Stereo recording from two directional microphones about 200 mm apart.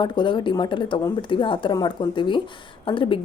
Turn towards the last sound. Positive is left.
turn(degrees=25)  # may be behind; listen again after turning